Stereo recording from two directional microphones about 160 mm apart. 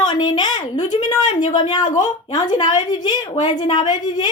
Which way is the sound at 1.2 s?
50° left (ahead or behind).